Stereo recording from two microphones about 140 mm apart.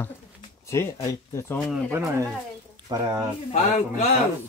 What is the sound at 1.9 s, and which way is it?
Speech, 20° right (ahead or behind).